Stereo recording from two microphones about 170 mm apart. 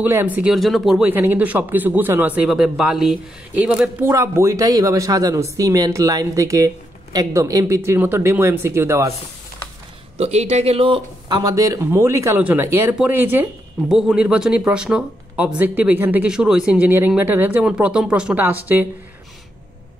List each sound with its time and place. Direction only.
0.0 s a man's voice: 10° right (ahead or behind)
10.1 s a man's voice: 40° right (ahead or behind); by 18.9 s 10° right (ahead or behind)